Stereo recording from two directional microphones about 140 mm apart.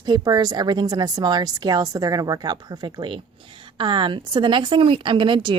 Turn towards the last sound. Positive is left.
turn(degrees=-35)  # may be behind; listen again after turning